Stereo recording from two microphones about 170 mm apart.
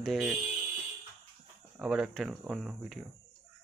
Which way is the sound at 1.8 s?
5° right (ahead or behind).